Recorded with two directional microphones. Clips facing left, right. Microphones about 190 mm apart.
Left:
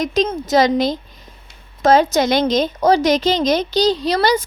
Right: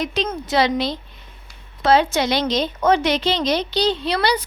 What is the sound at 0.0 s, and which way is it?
Speech, 40° left (ahead or behind).